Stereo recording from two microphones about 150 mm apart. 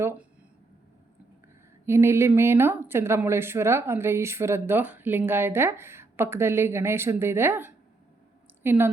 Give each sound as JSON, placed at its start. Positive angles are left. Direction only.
{"t": 1.9, "sound": "speech", "side_deg": -15}